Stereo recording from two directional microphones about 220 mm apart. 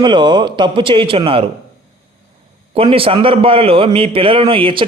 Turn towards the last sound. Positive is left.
turn(degrees=-25)  # may be behind; listen again after turning